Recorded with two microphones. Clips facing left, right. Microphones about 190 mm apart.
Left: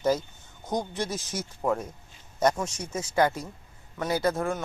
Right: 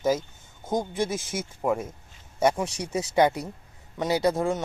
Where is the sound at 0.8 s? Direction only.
10° right (ahead or behind).